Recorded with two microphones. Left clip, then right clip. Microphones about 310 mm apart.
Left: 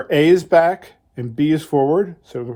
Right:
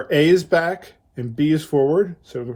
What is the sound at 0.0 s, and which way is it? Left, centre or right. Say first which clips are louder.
Speech: left 2 dB; left.